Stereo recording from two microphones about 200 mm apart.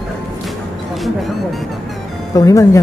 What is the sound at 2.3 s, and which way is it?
Speech, 15° left (ahead or behind).